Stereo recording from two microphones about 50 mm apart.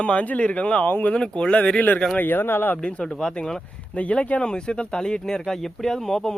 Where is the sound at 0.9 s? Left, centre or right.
Left.